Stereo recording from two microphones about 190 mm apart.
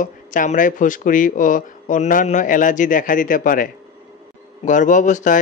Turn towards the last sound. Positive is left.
turn(degrees=40)  # may be behind; listen again after turning